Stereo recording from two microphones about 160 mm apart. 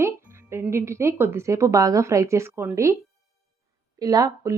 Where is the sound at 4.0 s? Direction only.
25° right (ahead or behind).